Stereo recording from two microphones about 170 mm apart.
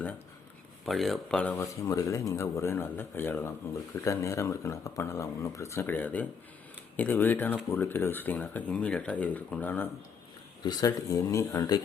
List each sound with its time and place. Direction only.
0.9 s speech: centre (ahead or behind)
1.6 s speech: 20° left (ahead or behind)
10.6 s speech: 25° left (ahead or behind)